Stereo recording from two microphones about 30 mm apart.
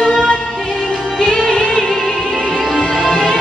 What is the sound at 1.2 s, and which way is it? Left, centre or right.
Music, left.